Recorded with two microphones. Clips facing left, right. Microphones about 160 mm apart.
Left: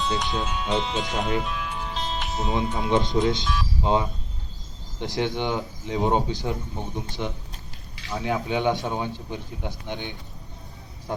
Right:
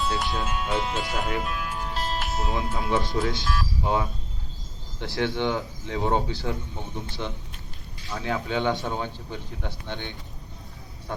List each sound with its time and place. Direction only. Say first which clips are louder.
0.2 s speech: left 1 dB; 5° right (ahead or behind)
2.9 s speech: left 4 dB; 20° left (ahead or behind)
3.4 s speech: left 1 dB; 5° right (ahead or behind)
4.9 s speech: left 1 dB; 15° left (ahead or behind)